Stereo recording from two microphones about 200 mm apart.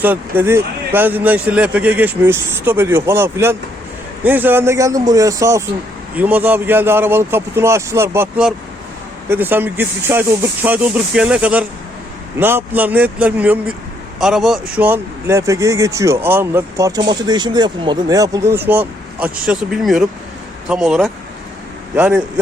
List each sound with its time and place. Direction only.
0.0 s speech: 10° right (ahead or behind)